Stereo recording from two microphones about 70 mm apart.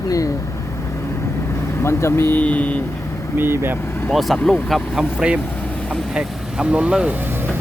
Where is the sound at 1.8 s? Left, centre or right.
Left.